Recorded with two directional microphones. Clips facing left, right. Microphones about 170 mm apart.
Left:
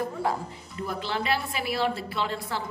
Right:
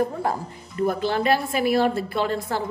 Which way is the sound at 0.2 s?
50° right (ahead or behind).